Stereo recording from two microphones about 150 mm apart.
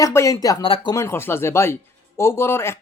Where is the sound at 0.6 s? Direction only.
35° left (ahead or behind).